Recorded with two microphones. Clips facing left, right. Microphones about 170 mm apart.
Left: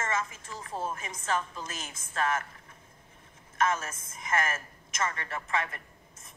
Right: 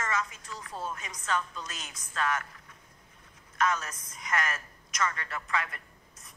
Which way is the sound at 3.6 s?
25° left (ahead or behind).